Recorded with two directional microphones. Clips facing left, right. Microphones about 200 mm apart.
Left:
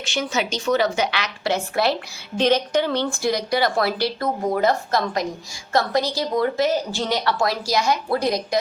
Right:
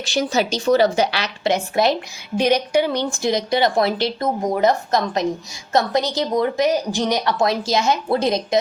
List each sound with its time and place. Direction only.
0.0 s a woman's voice: 35° right (ahead or behind)
1.5 s a woman's voice: 20° right (ahead or behind)